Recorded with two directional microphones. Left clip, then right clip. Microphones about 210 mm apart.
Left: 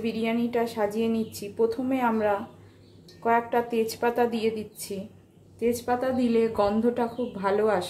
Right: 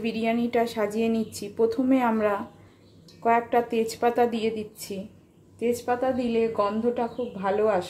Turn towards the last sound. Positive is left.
turn(degrees=-5)  # may be behind; listen again after turning